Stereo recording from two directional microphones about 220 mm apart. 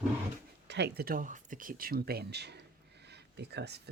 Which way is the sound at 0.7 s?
50° right (ahead or behind).